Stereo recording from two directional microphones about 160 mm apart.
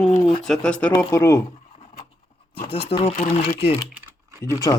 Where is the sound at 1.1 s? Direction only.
20° left (ahead or behind).